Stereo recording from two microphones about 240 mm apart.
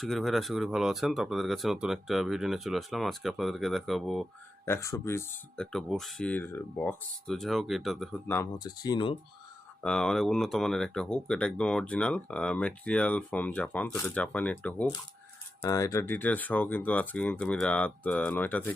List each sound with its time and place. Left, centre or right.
0.0 s speech: centre
8.4 s speech: centre
9.8 s speech: centre